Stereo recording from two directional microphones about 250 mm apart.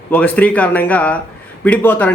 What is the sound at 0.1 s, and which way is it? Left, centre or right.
A man's voice, centre.